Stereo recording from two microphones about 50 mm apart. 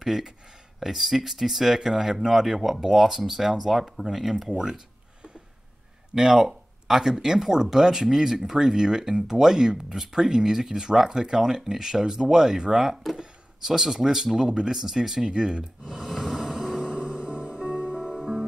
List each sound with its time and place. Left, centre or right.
0.0 s speech: centre
16.9 s music: centre